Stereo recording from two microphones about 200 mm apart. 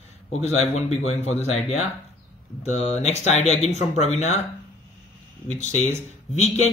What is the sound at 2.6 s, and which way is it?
A man's voice, 30° left (ahead or behind).